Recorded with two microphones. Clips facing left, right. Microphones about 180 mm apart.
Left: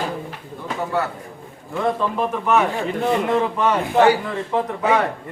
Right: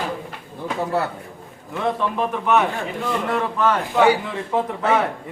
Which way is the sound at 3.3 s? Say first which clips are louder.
Left 2 dB; 15° left (ahead or behind).